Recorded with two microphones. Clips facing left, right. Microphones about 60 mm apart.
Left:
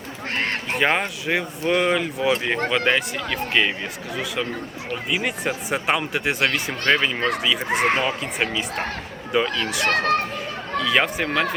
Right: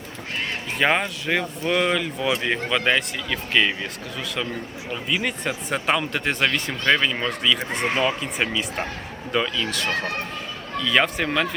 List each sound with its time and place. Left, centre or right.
0.3 s crow: left
0.8 s speech: centre
4.9 s speech: centre
7.7 s a child's voice: left
8.0 s speech: centre
9.8 s a child's voice: left
10.8 s speech: centre